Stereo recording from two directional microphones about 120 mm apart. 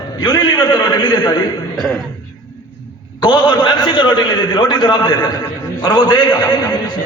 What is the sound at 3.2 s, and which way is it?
A man's voice, 40° left (ahead or behind).